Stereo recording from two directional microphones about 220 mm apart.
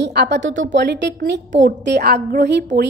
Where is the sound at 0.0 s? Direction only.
50° right (ahead or behind).